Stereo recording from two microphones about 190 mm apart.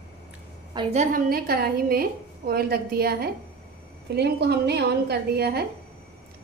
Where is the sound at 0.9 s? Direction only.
50° right (ahead or behind).